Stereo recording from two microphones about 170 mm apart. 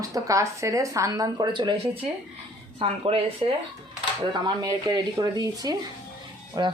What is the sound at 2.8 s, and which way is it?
Speech, 35° right (ahead or behind).